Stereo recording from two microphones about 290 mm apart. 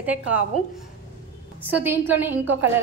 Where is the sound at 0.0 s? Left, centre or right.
Centre.